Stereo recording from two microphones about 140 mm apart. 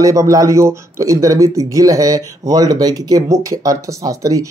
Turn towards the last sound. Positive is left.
turn(degrees=-25)  # may be behind; listen again after turning